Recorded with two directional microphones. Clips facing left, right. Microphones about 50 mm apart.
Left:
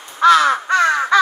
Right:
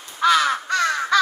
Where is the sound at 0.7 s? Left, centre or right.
Left.